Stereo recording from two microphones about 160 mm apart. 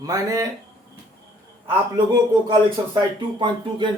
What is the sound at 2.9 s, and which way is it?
Speech, 30° right (ahead or behind).